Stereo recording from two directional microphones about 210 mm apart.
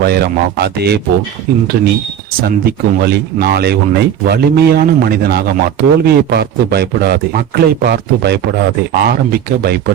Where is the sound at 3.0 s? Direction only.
50° right (ahead or behind).